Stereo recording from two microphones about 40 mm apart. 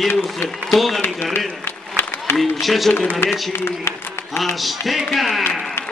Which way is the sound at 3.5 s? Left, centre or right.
Left.